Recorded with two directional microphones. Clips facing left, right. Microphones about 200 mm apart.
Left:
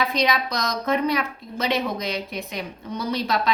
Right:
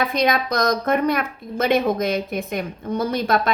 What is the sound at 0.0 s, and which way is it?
A woman's voice, 50° right (ahead or behind).